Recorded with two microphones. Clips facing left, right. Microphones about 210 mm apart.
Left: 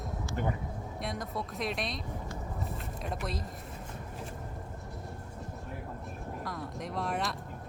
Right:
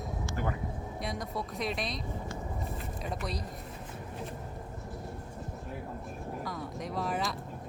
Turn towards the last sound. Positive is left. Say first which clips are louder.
# right 1 dB
turn(degrees=0)  # may be behind; listen again after turning